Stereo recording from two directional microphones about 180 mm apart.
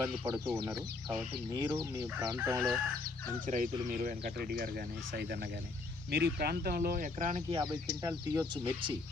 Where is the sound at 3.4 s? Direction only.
45° right (ahead or behind).